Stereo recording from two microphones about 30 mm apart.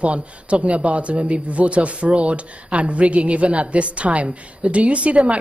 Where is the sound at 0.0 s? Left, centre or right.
Right.